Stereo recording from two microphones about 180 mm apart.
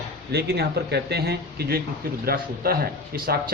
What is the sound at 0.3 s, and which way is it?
A man's voice, 65° right (ahead or behind).